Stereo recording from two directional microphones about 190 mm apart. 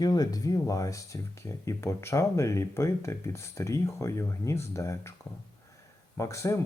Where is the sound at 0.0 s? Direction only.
20° left (ahead or behind).